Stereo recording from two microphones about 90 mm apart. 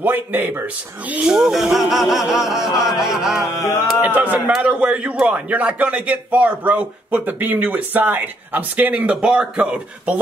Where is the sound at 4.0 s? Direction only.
20° right (ahead or behind).